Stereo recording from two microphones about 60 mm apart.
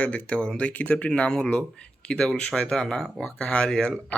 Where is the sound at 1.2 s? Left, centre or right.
Centre.